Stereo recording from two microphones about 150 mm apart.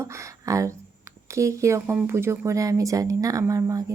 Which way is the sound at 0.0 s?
20° right (ahead or behind).